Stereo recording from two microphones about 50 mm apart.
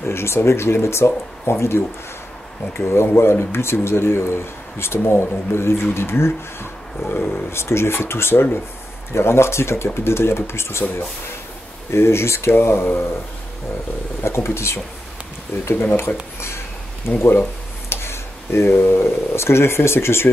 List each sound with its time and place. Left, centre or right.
0.1 s speech: left
2.9 s speech: left
7.5 s speech: left
14.2 s speech: left
15.7 s speech: left
16.3 s a sound: left
17.1 s speech: centre
17.8 s speech: left